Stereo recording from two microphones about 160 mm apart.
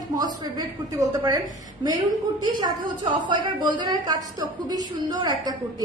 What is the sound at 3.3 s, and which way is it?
A woman's voice, 30° right (ahead or behind).